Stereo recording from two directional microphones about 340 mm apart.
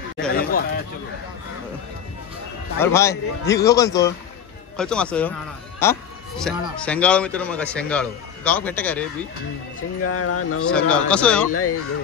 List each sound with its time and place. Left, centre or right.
0.4 s a sound: left
2.8 s a man's voice: centre
5.8 s music: centre
6.8 s a man's voice: centre
10.0 s speech: left
10.7 s a man's voice: centre
11.5 s speech: left